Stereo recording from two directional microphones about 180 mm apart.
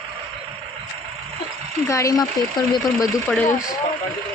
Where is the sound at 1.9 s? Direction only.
15° left (ahead or behind).